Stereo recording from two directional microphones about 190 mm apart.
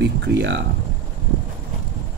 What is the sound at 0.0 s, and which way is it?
Speech, 65° right (ahead or behind).